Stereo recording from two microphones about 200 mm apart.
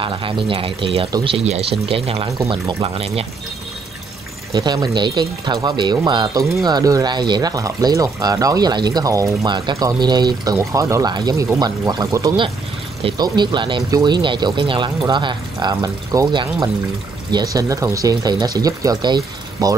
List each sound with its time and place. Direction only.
0.0 s speech: 25° right (ahead or behind)
2.4 s speech: 15° right (ahead or behind)
2.8 s speech: 30° right (ahead or behind)
4.5 s speech: 20° right (ahead or behind)